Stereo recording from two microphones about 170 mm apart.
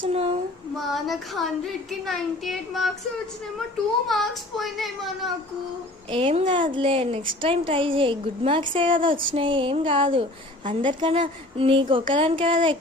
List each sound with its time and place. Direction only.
0.0 s a sound: 35° right (ahead or behind)
0.8 s a child's voice: centre (ahead or behind)
4.0 s a child's voice: centre (ahead or behind)
6.1 s a woman's voice: 30° right (ahead or behind)